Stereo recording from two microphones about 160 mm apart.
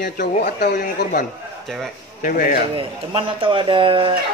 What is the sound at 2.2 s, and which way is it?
Speech, 60° left (ahead or behind).